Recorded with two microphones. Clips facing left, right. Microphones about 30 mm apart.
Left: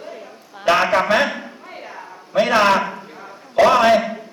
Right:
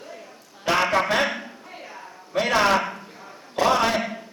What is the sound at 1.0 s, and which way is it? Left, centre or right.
Speech, centre.